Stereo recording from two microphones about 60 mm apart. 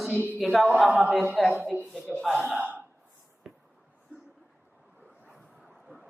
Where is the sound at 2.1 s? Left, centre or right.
Right.